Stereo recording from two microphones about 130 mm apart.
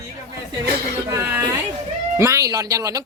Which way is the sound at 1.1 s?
20° right (ahead or behind).